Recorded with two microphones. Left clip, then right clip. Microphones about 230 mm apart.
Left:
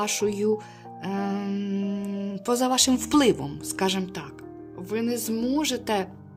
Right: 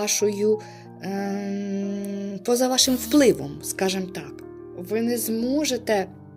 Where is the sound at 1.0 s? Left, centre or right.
Centre.